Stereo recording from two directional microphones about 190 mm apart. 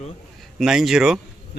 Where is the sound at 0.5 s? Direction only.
Centre (ahead or behind).